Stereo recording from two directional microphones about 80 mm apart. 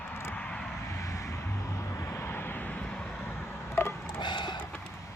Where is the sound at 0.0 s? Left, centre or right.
Left.